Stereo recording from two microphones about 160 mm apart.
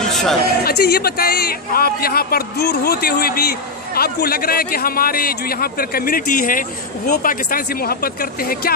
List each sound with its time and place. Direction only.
0.0 s music: centre (ahead or behind)
0.6 s a man's voice: 75° left (ahead or behind)